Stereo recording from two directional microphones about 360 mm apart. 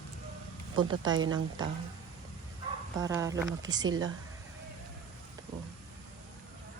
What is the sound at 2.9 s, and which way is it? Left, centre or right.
Speech, centre.